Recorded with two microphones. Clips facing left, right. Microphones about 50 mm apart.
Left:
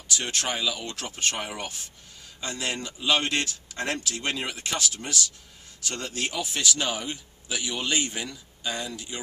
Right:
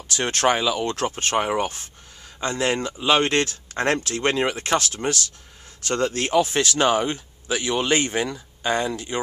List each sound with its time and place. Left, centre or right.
0.1 s speech: right